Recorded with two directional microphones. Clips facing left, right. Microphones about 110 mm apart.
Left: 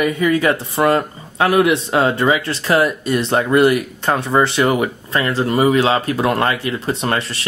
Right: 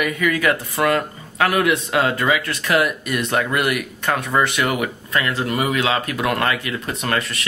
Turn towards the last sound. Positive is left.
turn(degrees=30)  # may be behind; listen again after turning